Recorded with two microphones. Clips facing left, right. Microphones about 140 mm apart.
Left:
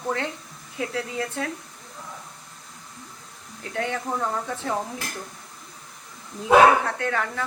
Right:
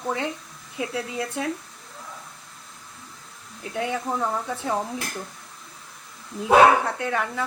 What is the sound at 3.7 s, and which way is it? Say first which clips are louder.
A woman's voice: right 1 dB; 15° right (ahead or behind).